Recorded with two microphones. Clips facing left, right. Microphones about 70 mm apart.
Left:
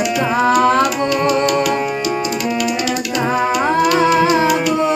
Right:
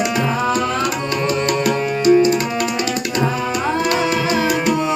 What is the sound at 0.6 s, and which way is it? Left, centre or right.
Music, left.